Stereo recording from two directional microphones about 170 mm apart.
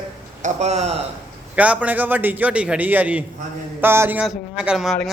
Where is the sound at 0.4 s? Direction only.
40° right (ahead or behind).